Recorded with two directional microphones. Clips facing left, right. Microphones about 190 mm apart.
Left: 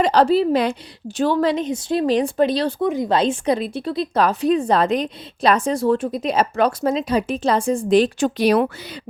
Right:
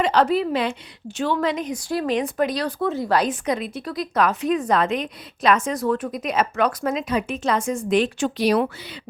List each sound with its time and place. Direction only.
0.0 s a woman's voice: 35° left (ahead or behind)
2.8 s a woman's voice: 15° left (ahead or behind); by 8.3 s 35° left (ahead or behind)
8.4 s speech: 55° left (ahead or behind)